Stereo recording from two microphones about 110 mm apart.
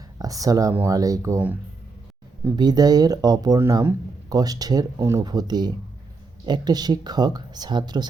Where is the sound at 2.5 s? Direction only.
40° right (ahead or behind).